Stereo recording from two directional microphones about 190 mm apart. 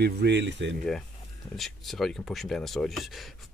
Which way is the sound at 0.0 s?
60° right (ahead or behind).